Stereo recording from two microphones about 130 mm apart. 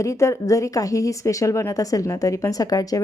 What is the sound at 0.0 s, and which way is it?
Speech, 25° left (ahead or behind).